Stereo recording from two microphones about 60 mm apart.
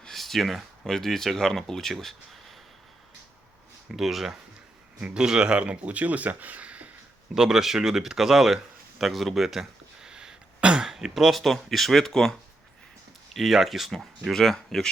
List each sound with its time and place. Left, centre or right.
0.0 s speech: centre
3.9 s speech: centre; by 6.9 s right
7.3 s speech: centre
9.0 s a sound: centre
10.8 s speech: centre